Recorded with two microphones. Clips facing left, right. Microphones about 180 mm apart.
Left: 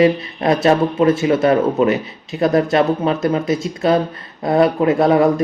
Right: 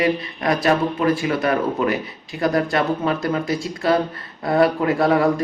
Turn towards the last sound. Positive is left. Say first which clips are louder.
# left 4 dB
turn(degrees=20)  # may be behind; listen again after turning